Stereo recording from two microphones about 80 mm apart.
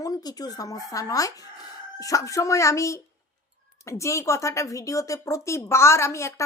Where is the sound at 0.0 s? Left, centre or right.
Left.